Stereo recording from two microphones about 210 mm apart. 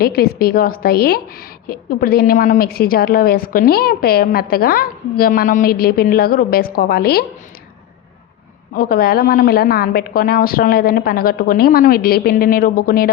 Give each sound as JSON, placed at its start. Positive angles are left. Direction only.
{"t": 0.0, "sound": "a woman's voice", "side_deg": 45}
{"t": 8.7, "sound": "a woman's voice", "side_deg": 45}